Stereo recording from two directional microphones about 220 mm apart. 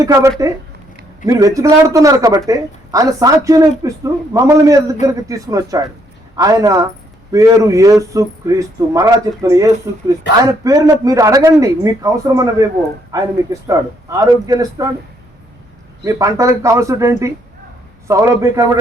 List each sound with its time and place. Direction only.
0.0 s speech: 15° right (ahead or behind)
16.0 s speech: 15° right (ahead or behind)